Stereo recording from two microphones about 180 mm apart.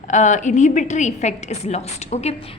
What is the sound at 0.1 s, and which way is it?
A woman's voice, 40° left (ahead or behind).